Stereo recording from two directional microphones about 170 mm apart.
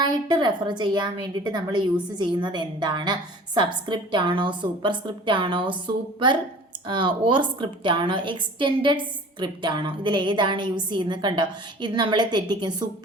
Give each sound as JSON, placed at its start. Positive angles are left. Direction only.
{"t": 0.0, "sound": "a woman's voice", "side_deg": -25}
{"t": 6.8, "sound": "a woman's voice", "side_deg": -30}